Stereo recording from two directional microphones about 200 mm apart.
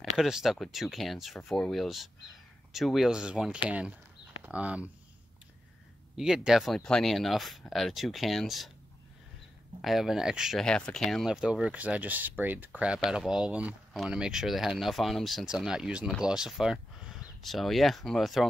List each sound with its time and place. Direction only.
0.2 s speech: centre (ahead or behind)
6.1 s speech: centre (ahead or behind)
9.8 s speech: centre (ahead or behind)